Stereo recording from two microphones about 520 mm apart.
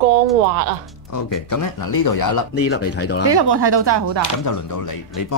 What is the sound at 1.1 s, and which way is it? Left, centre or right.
Speech, left.